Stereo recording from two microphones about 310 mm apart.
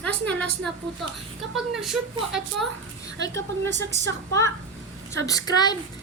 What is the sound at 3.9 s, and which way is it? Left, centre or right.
A woman's voice, centre.